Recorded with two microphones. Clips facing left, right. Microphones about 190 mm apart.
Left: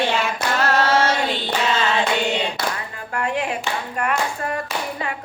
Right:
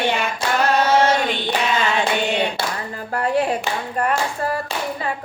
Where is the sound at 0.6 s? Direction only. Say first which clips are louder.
Right 2 dB; 15° right (ahead or behind).